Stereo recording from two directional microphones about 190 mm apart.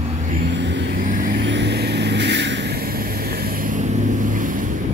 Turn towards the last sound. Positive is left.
turn(degrees=-45)  # may be behind; listen again after turning